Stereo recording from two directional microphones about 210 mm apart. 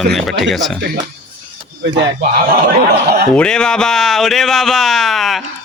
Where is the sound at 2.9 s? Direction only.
50° right (ahead or behind).